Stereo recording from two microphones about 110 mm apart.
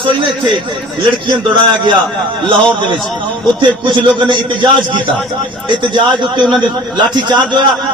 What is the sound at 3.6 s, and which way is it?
A man's voice, 45° right (ahead or behind).